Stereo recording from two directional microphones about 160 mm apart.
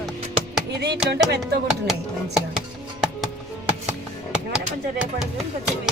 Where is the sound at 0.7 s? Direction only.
90° right.